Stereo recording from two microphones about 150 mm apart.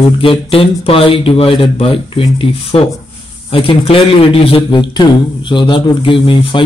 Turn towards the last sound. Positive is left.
turn(degrees=35)  # may be behind; listen again after turning